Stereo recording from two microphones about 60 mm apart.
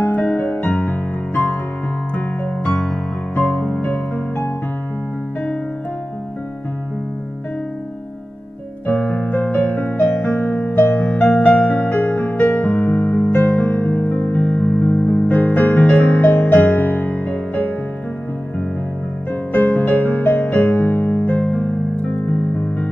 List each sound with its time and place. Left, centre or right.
0.0 s music: left
2.1 s keyboard: left
3.3 s music: left
8.8 s piano: centre
9.4 s music: left
19.5 s music: left